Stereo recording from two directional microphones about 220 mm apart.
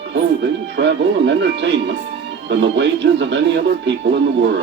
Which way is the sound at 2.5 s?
55° right (ahead or behind).